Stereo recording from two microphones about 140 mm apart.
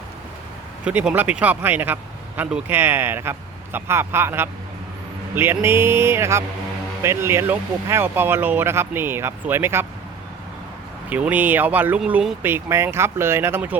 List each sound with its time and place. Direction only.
0.9 s speech: 10° right (ahead or behind)
11.1 s speech: 10° right (ahead or behind)